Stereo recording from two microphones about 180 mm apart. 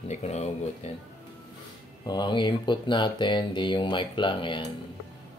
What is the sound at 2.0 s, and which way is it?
Speech, 25° left (ahead or behind).